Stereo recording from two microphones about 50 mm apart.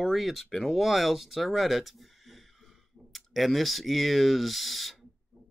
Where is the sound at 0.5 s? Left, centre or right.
Centre.